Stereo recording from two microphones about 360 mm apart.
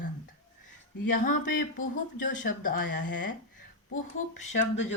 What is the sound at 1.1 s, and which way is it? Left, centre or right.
Speech, left.